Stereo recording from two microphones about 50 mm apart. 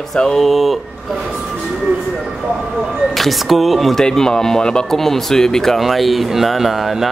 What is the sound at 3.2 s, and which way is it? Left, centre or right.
Speech, centre.